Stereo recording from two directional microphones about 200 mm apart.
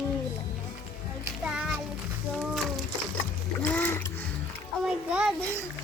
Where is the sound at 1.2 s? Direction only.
5° right (ahead or behind).